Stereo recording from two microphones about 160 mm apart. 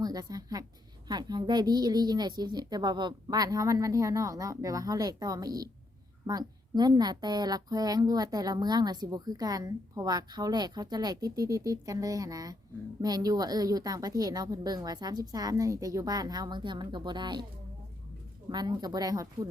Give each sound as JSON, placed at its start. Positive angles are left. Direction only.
{"t": 0.0, "sound": "a woman's voice", "side_deg": -25}
{"t": 18.4, "sound": "a woman's voice", "side_deg": -25}